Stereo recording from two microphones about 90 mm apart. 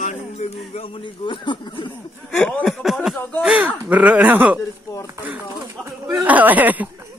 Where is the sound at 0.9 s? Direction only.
60° left (ahead or behind).